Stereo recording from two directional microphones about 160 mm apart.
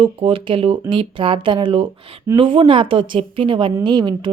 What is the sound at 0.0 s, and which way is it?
Speech, 35° right (ahead or behind).